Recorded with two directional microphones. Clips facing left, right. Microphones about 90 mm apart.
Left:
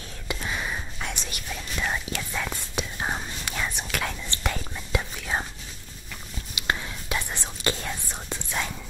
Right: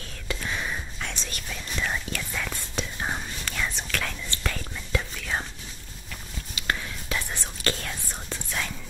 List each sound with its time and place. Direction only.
0.3 s whispering: 10° left (ahead or behind)
6.5 s whispering: 15° left (ahead or behind)